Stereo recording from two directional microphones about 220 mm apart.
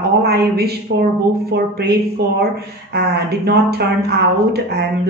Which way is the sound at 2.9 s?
50° right (ahead or behind).